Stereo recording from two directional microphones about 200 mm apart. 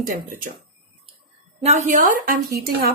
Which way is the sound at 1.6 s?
35° right (ahead or behind).